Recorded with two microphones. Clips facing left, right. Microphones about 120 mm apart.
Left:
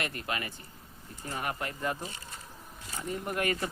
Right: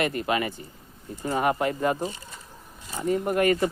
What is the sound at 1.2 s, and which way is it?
Speech, 90° right.